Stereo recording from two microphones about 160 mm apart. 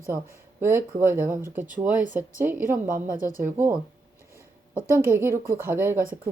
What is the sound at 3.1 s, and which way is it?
Speech, 55° right (ahead or behind).